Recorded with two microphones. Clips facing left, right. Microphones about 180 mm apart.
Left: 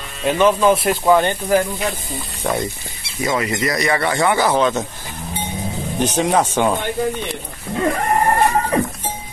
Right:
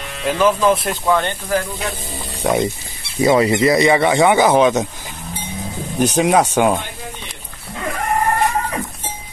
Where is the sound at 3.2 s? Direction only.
30° right (ahead or behind).